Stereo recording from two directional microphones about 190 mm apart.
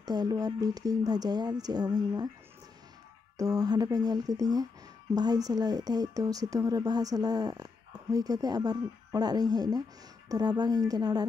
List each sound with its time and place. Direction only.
0.0 s speech: 20° right (ahead or behind)
3.3 s speech: 20° right (ahead or behind)